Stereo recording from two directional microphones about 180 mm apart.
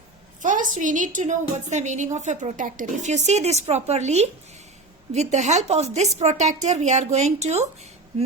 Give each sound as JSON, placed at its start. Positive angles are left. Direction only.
{"t": 0.4, "sound": "a woman's voice", "side_deg": -45}